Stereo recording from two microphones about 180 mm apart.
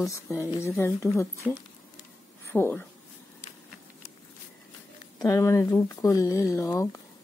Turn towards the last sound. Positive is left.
turn(degrees=15)  # may be behind; listen again after turning